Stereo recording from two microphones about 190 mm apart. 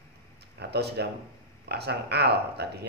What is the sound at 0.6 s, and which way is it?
Speech, 60° right (ahead or behind).